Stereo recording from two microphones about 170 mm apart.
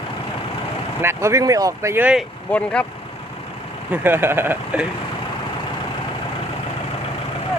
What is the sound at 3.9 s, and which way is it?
Speech, 10° right (ahead or behind).